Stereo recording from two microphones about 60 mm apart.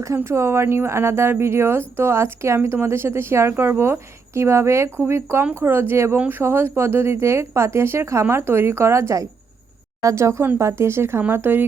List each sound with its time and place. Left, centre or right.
0.3 s speech: right
6.1 s speech: right